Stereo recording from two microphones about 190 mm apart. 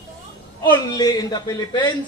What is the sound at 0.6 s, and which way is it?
A man's voice, 20° left (ahead or behind).